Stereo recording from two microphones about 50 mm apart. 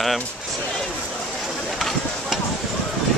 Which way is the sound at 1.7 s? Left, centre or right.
Centre.